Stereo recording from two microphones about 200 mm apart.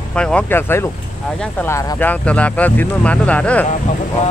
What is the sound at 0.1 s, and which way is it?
Speech, 5° left (ahead or behind).